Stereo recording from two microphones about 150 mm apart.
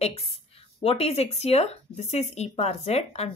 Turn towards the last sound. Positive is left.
turn(degrees=45)  # may be behind; listen again after turning